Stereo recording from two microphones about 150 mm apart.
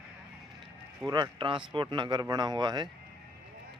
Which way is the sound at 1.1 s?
30° right (ahead or behind).